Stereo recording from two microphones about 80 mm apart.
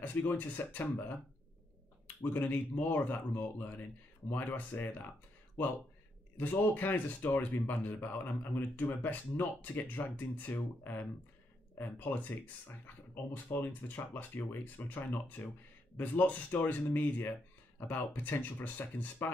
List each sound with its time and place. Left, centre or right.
0.0 s speech: left
2.3 s speech: left
6.3 s speech: left